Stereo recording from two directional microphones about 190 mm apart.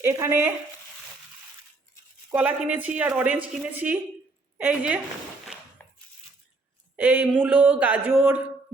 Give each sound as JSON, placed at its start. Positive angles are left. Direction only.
{"t": 0.0, "sound": "speech", "side_deg": -15}
{"t": 2.3, "sound": "a woman's voice", "side_deg": -10}
{"t": 6.9, "sound": "speech", "side_deg": -10}